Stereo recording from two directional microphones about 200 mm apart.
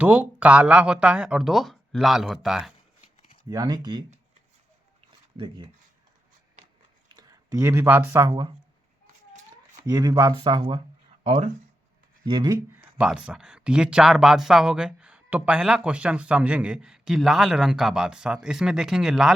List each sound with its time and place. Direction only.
0.0 s speech: 10° right (ahead or behind)
3.0 s a sound: 30° left (ahead or behind)
3.5 s speech: 20° right (ahead or behind)
7.1 s speech: 20° right (ahead or behind)
9.8 s speech: 15° right (ahead or behind)
11.2 s speech: 35° right (ahead or behind)
12.2 s speech: 20° right (ahead or behind); by 19.3 s 5° right (ahead or behind)